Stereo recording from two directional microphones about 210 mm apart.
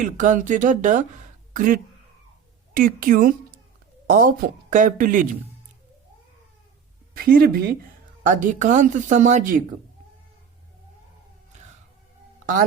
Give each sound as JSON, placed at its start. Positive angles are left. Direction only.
{"t": 0.0, "sound": "a woman's voice", "side_deg": -35}
{"t": 7.1, "sound": "speech", "side_deg": -45}
{"t": 8.3, "sound": "a woman's voice", "side_deg": -35}